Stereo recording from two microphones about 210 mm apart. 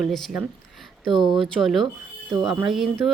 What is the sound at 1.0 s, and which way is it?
Speech, 20° right (ahead or behind).